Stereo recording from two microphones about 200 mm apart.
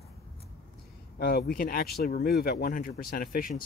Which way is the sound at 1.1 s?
50° left (ahead or behind).